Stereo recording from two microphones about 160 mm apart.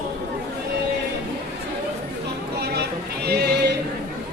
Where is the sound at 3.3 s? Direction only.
90° right.